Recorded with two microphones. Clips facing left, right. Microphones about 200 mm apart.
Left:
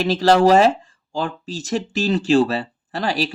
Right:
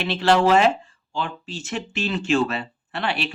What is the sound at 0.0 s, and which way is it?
Speech, 40° left (ahead or behind).